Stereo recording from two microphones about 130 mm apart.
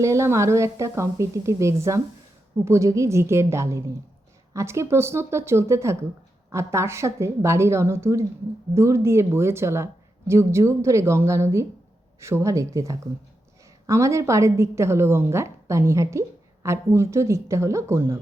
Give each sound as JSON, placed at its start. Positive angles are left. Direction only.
{"t": 0.0, "sound": "a woman's voice", "side_deg": -20}